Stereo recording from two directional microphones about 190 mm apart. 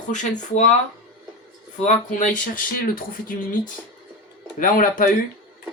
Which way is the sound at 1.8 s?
40° left (ahead or behind).